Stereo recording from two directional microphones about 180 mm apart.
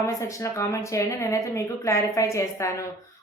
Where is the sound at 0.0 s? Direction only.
15° left (ahead or behind).